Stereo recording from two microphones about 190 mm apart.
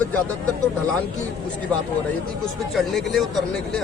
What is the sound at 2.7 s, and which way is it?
Speech, centre (ahead or behind).